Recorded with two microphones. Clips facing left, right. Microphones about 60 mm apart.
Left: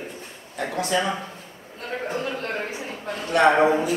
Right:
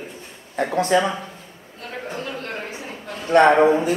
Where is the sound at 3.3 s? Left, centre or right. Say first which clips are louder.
Right 4 dB; right.